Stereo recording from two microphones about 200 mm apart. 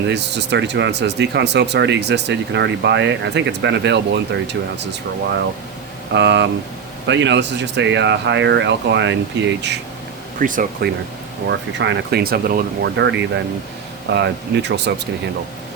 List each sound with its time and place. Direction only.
0.1 s speech: 60° right (ahead or behind)
6.1 s speech: 60° right (ahead or behind)
10.4 s speech: 40° right (ahead or behind)
11.4 s speech: 65° right (ahead or behind)